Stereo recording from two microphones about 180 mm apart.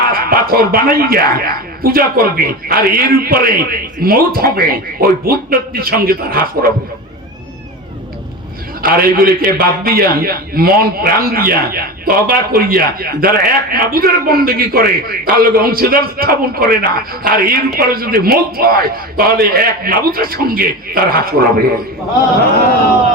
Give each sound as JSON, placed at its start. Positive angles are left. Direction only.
{"t": 0.1, "sound": "speech", "side_deg": -55}
{"t": 8.8, "sound": "speech", "side_deg": -55}